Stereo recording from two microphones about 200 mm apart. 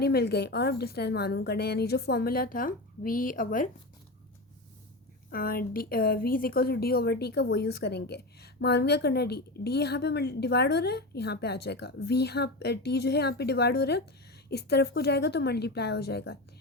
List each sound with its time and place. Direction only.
0.0 s speech: 55° left (ahead or behind)
5.3 s speech: 45° left (ahead or behind)